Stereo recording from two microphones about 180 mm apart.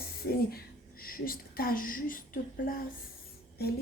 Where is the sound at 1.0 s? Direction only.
55° left (ahead or behind).